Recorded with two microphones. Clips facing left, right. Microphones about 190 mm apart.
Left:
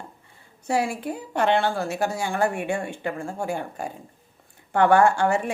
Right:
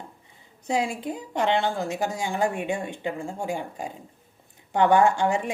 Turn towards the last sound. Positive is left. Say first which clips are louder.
# left 2 dB
turn(degrees=-15)  # may be behind; listen again after turning